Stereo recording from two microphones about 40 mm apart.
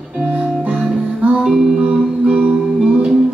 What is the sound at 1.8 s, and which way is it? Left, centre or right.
Music, right.